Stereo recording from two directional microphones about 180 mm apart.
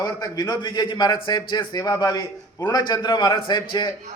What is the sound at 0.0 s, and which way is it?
A man's voice, 20° left (ahead or behind).